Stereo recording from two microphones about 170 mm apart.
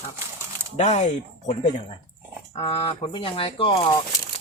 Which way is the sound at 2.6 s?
30° left (ahead or behind).